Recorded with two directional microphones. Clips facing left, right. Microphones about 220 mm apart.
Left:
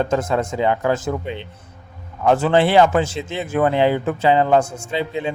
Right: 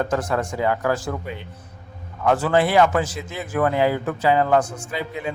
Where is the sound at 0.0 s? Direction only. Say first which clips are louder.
Left 3 dB; 25° left (ahead or behind).